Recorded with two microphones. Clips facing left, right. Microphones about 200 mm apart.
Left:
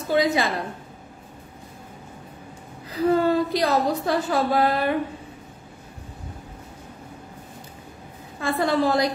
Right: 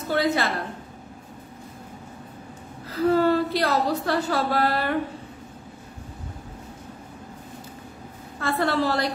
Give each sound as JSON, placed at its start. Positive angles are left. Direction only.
{"t": 0.1, "sound": "a woman's voice", "side_deg": 15}
{"t": 2.9, "sound": "a woman's voice", "side_deg": 15}
{"t": 8.4, "sound": "a woman's voice", "side_deg": 15}